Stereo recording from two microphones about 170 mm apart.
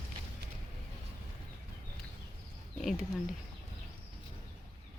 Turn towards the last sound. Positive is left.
turn(degrees=0)  # may be behind; listen again after turning